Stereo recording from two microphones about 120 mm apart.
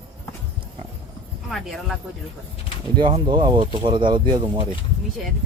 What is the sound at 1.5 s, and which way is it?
Speech, centre (ahead or behind).